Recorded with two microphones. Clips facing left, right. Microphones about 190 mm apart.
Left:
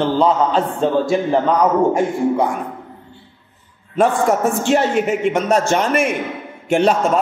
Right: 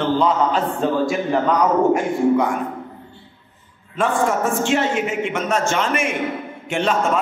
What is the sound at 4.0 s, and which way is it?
A man's voice, 40° left (ahead or behind).